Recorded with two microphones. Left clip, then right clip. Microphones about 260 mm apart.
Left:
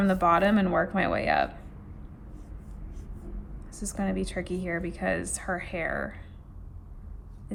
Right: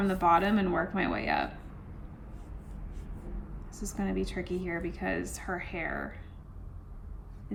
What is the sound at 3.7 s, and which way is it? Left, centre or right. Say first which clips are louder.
A woman's voice: left 2 dB; left.